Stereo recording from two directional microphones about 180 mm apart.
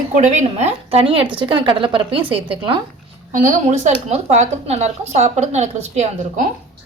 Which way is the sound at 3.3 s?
45° right (ahead or behind).